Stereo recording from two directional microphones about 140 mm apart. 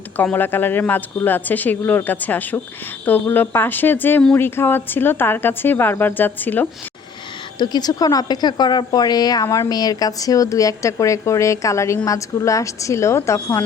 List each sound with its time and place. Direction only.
0.2 s speech: 15° left (ahead or behind)
7.6 s a woman's voice: 30° left (ahead or behind)